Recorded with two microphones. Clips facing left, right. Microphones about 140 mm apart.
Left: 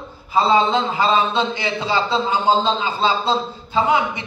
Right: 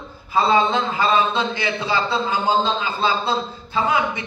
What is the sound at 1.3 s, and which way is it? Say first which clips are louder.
Speech: left 2 dB; 20° left (ahead or behind).